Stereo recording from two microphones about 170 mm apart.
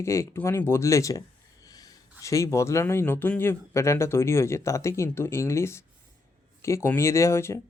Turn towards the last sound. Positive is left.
turn(degrees=15)  # may be behind; listen again after turning